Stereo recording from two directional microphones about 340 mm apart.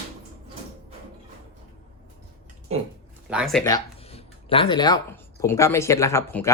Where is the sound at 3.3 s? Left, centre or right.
Centre.